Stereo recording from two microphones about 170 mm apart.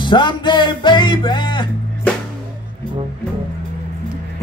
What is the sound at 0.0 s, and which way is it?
Music, 25° left (ahead or behind).